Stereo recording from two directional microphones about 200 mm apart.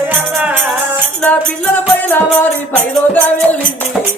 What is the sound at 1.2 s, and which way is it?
Music, 5° left (ahead or behind).